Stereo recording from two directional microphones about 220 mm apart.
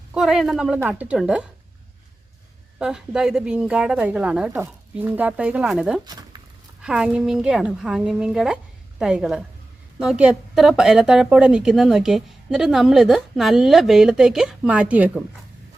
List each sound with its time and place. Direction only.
0.1 s a woman's voice: centre (ahead or behind)
2.7 s a woman's voice: 5° right (ahead or behind)
6.1 s a sound: 15° right (ahead or behind)
6.8 s a woman's voice: 5° right (ahead or behind)